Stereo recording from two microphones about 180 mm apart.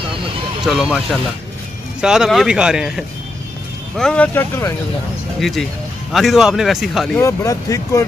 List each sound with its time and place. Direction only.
0.7 s speech: centre (ahead or behind); by 4.7 s 15° left (ahead or behind)
5.4 s speech: centre (ahead or behind)
7.2 s speech: 15° left (ahead or behind)